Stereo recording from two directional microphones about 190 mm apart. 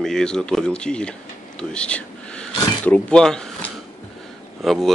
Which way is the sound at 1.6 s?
5° left (ahead or behind).